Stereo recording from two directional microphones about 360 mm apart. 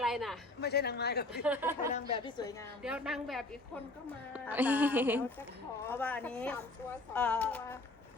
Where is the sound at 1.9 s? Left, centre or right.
Centre.